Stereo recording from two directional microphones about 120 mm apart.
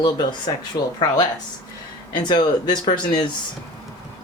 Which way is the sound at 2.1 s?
40° left (ahead or behind).